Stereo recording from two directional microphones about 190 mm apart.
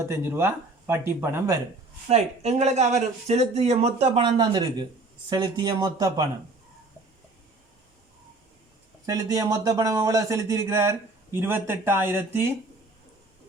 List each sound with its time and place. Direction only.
0.0 s speech: 10° right (ahead or behind)
2.0 s speech: 35° right (ahead or behind)
9.0 s speech: 15° right (ahead or behind)